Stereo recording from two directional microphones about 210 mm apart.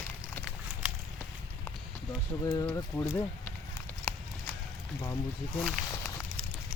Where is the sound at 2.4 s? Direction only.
20° left (ahead or behind).